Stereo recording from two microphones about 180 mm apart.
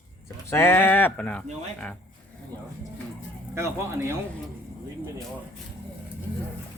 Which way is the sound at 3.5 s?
15° right (ahead or behind).